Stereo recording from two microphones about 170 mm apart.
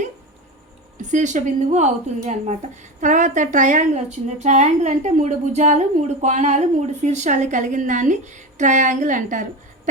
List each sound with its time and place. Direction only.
1.1 s a woman's voice: 45° right (ahead or behind)